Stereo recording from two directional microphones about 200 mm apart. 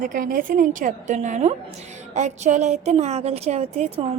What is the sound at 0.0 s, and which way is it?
Speech, 45° right (ahead or behind).